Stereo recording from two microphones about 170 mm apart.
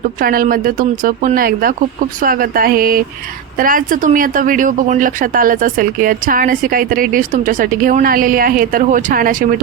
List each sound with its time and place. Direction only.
0.2 s speech: 55° right (ahead or behind)